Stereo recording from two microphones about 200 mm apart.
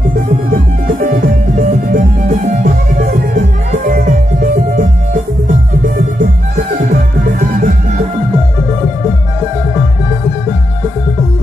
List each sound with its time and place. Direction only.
0.5 s music: 45° right (ahead or behind)